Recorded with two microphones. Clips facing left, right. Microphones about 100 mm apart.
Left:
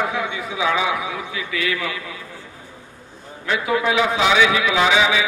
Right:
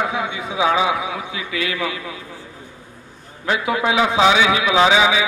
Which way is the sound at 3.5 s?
25° right (ahead or behind).